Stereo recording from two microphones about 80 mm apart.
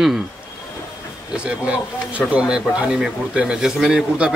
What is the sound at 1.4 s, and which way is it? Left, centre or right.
A man's voice, centre.